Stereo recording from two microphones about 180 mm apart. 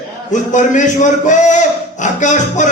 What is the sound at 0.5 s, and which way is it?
Music, 45° left (ahead or behind).